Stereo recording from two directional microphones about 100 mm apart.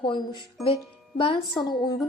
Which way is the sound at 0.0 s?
50° left (ahead or behind).